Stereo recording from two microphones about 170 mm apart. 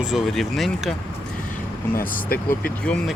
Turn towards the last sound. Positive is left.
turn(degrees=5)  # may be behind; listen again after turning